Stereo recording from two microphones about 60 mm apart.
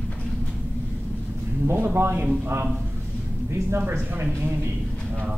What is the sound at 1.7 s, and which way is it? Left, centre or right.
Speech, right.